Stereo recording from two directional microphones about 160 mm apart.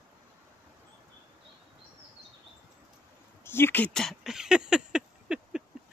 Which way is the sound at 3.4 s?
15° left (ahead or behind).